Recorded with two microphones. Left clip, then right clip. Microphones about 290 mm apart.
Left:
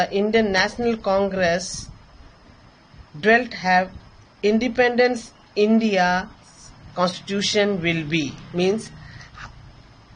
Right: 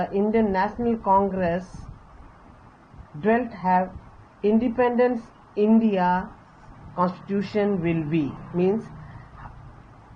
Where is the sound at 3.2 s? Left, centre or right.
Left.